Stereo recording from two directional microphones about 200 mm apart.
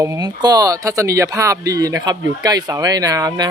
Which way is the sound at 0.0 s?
15° right (ahead or behind).